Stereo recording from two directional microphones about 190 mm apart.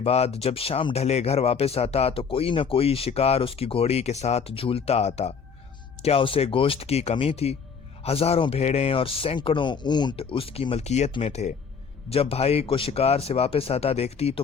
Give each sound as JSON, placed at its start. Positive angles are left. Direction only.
{"t": 0.0, "sound": "speech", "side_deg": 35}